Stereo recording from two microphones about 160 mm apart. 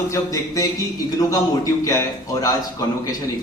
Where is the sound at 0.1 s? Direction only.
20° left (ahead or behind).